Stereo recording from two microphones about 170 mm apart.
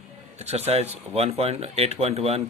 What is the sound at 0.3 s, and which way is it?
A man's voice, 40° right (ahead or behind).